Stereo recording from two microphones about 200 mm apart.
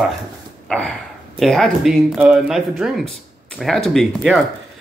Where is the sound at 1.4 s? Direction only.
Centre (ahead or behind).